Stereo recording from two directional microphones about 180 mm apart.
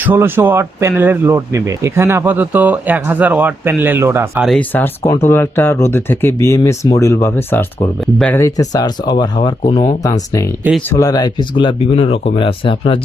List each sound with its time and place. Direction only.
0.0 s speech: 10° right (ahead or behind)
4.4 s speech: 5° left (ahead or behind); by 13.0 s 30° left (ahead or behind)